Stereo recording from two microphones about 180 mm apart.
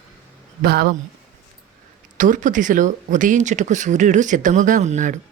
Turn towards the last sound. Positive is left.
turn(degrees=-45)  # may be behind; listen again after turning